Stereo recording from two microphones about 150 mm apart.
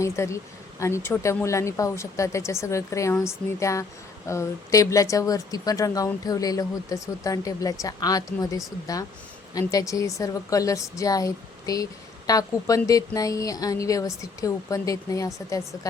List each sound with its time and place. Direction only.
0.0 s a woman's voice: 20° left (ahead or behind)